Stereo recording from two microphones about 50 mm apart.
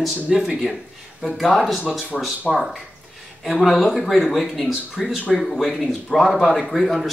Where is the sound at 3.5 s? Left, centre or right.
Centre.